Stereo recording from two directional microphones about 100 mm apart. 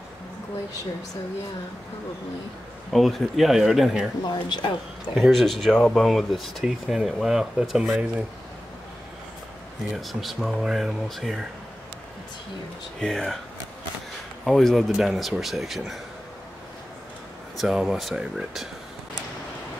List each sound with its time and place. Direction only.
2.9 s speech: centre (ahead or behind)
4.2 s speech: 50° left (ahead or behind)
5.1 s speech: centre (ahead or behind)
8.0 s speech: 15° right (ahead or behind)
9.9 s speech: centre (ahead or behind)
13.0 s speech: 5° left (ahead or behind)
14.4 s speech: 5° left (ahead or behind)
17.6 s speech: 5° right (ahead or behind)